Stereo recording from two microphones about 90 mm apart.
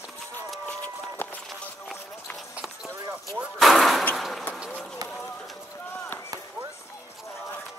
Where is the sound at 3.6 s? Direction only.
Centre (ahead or behind).